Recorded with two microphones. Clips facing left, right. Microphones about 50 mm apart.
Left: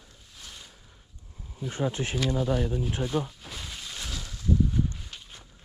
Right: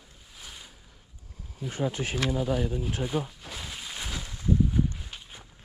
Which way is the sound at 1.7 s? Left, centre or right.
Left.